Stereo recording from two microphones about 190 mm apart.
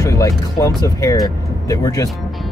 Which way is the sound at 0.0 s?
15° left (ahead or behind).